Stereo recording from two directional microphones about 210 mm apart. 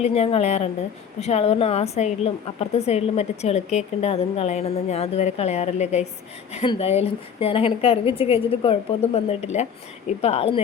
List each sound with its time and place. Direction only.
0.0 s a woman's voice: 30° left (ahead or behind)